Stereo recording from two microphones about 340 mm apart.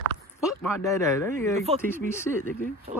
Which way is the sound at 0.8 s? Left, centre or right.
Centre.